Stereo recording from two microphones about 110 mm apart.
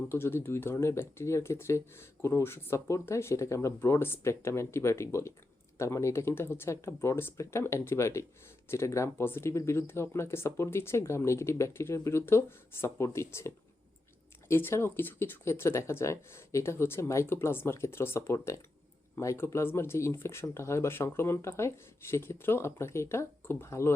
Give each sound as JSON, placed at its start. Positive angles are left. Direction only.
{"t": 0.1, "sound": "speech", "side_deg": 20}